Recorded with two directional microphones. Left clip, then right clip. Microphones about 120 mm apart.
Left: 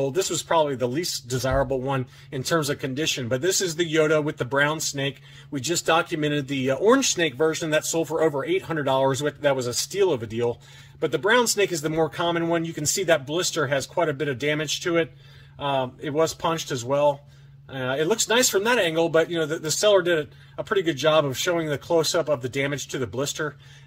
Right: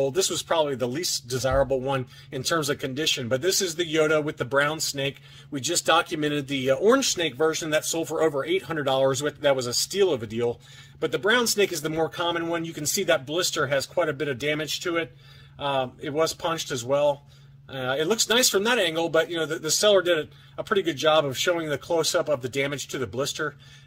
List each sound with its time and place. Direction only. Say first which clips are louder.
0.0 s speech: even; 30° right (ahead or behind)